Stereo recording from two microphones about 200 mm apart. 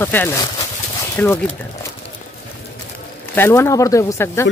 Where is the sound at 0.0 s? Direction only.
10° left (ahead or behind).